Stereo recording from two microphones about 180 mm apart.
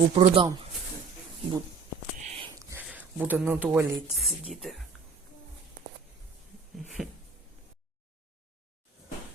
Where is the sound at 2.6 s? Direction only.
15° right (ahead or behind).